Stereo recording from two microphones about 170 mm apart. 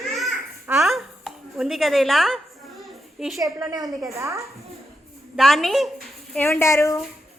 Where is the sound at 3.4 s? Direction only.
20° right (ahead or behind).